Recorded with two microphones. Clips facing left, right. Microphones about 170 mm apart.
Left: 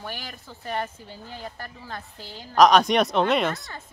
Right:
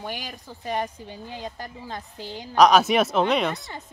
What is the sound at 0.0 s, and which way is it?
Speech, 15° right (ahead or behind).